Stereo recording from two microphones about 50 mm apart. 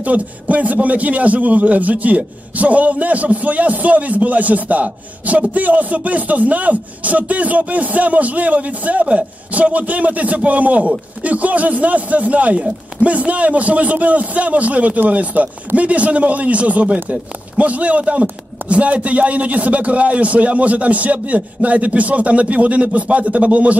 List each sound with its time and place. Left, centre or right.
0.0 s a man's voice: right